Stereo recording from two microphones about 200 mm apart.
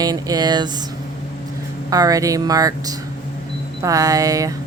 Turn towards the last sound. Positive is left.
turn(degrees=-15)  # may be behind; listen again after turning